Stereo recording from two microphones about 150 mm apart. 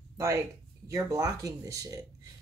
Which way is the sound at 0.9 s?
25° right (ahead or behind).